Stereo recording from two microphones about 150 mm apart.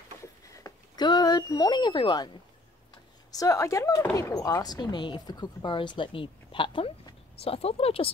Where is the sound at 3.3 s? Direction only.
25° left (ahead or behind).